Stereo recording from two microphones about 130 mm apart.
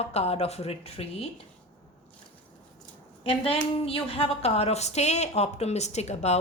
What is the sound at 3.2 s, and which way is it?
A woman's voice, 50° left (ahead or behind).